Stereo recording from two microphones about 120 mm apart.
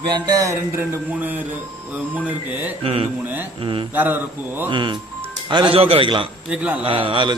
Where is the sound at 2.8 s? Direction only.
55° right (ahead or behind).